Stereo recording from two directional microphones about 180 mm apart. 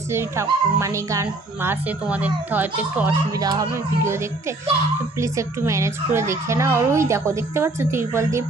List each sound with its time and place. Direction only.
0.1 s speech: 15° right (ahead or behind)